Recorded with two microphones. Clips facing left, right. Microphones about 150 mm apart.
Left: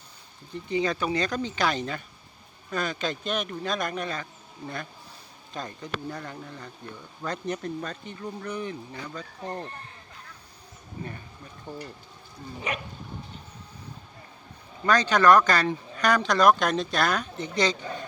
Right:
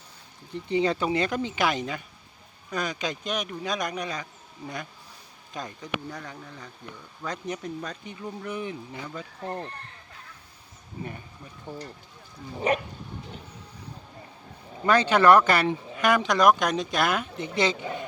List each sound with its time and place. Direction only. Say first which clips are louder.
0.5 s speech: right 2 dB; 25° right (ahead or behind)
2.6 s speech: left 1 dB; 15° right (ahead or behind)
5.8 s speech: even; 5° left (ahead or behind)
7.3 s speech: left 2 dB; 10° right (ahead or behind)
9.0 s speech: right 1 dB; 5° right (ahead or behind)
11.0 s speech: right 1 dB; 35° left (ahead or behind)
11.7 s speech: even; 10° right (ahead or behind)
12.5 s speech: right 8 dB; 35° right (ahead or behind)
14.8 s speech: right 1 dB; 25° right (ahead or behind)